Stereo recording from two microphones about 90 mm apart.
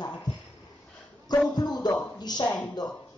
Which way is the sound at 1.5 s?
50° left (ahead or behind).